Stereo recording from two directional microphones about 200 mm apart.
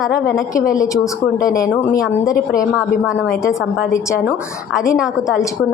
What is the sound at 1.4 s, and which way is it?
A woman's voice, 15° left (ahead or behind).